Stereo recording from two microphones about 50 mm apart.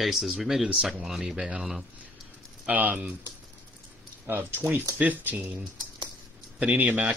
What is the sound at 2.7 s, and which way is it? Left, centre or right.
Speech, right.